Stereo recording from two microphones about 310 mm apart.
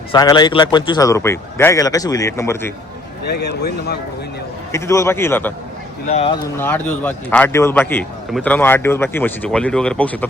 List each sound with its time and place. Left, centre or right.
0.1 s a man's voice: centre
3.2 s a man's voice: left
4.7 s a man's voice: centre
6.1 s speech: centre
6.6 s a man's voice: centre